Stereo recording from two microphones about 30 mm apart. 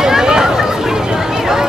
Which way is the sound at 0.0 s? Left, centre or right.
Centre.